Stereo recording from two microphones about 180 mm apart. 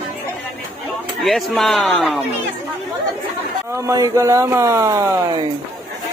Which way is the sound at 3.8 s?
20° right (ahead or behind).